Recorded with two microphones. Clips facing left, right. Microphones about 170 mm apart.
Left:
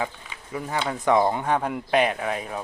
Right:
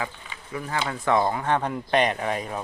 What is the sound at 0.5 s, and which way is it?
Speech, 20° left (ahead or behind).